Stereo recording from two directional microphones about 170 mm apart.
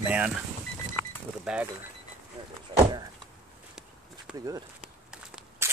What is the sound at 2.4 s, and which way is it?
Speech, 35° right (ahead or behind).